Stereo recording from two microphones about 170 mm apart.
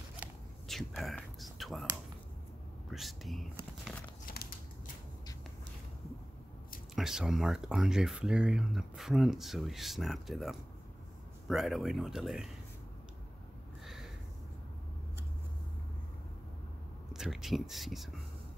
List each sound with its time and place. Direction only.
0.7 s whispering: centre (ahead or behind)
2.9 s speech: centre (ahead or behind)
4.3 s a sound: 55° left (ahead or behind)
7.0 s speech: 5° right (ahead or behind)
13.8 s a sound: centre (ahead or behind)
17.1 s speech: centre (ahead or behind)